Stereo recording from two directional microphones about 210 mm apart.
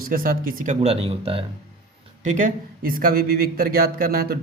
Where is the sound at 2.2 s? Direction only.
35° right (ahead or behind).